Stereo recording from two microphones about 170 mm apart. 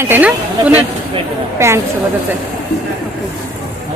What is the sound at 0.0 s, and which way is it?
Speech, 10° right (ahead or behind).